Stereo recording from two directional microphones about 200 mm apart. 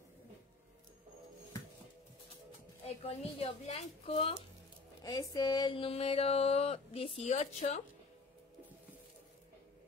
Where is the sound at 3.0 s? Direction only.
30° left (ahead or behind).